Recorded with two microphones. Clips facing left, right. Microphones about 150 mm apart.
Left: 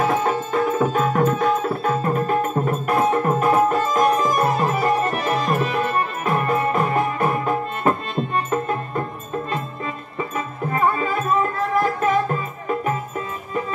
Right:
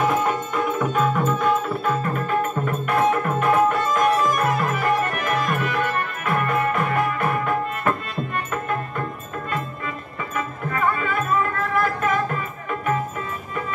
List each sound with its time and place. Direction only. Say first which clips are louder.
0.0 s music: left 1 dB; 35° left (ahead or behind)
10.3 s music: even; 30° left (ahead or behind)